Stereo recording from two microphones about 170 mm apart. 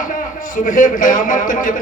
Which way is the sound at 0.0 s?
50° left (ahead or behind).